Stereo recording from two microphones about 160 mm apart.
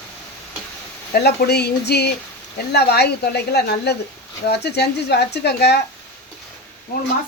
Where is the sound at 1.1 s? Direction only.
90° left.